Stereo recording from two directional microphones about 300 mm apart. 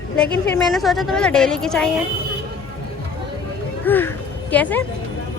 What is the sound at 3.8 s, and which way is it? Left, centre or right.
A woman's voice, centre.